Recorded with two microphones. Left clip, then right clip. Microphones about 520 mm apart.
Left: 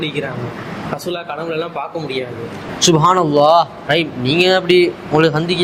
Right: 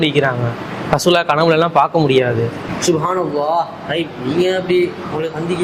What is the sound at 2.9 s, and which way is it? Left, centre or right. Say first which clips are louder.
A man's voice: left 4 dB; left.